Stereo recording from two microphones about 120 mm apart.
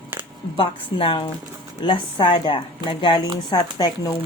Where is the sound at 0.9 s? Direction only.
45° left (ahead or behind).